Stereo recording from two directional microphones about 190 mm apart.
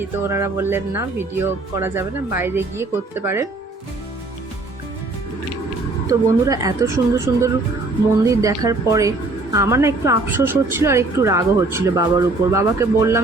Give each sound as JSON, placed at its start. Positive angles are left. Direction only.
{"t": 0.2, "sound": "speech", "side_deg": -15}
{"t": 6.1, "sound": "speech", "side_deg": -15}